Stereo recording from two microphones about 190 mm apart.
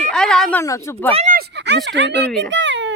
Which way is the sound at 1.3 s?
60° right (ahead or behind).